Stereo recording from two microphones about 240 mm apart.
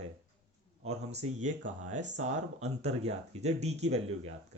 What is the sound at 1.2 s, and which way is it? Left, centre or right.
Speech, right.